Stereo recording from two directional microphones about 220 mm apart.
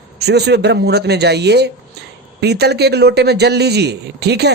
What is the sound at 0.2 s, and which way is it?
Speech, 50° right (ahead or behind).